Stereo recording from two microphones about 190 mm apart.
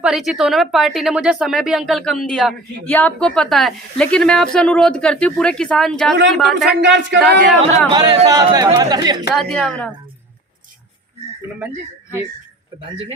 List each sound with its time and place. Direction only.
0.0 s a woman's voice: centre (ahead or behind)
6.8 s singing: 65° right (ahead or behind)
7.2 s a woman's voice: centre (ahead or behind)
7.9 s speech: 20° right (ahead or behind)
9.3 s a woman's voice: centre (ahead or behind)